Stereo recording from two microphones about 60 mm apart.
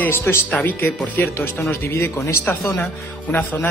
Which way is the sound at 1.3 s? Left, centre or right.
Left.